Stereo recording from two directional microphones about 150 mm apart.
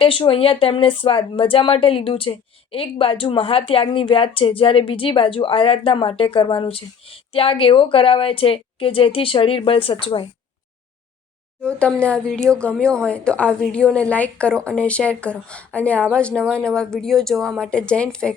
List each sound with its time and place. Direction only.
0.0 s speech: 35° left (ahead or behind)
11.6 s speech: 5° left (ahead or behind)